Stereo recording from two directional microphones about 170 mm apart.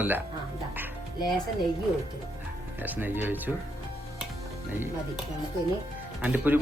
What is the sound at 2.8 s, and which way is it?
Speech, 10° right (ahead or behind).